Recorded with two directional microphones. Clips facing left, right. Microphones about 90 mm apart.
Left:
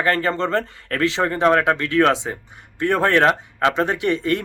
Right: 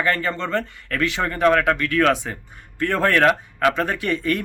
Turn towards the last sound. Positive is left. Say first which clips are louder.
# left 2 dB
turn(degrees=20)  # may be behind; listen again after turning